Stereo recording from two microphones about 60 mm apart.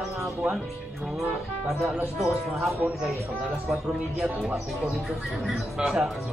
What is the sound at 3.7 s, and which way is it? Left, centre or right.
Speech, right.